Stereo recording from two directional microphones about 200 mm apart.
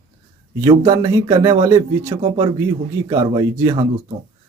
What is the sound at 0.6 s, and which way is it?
A man's voice, 15° right (ahead or behind).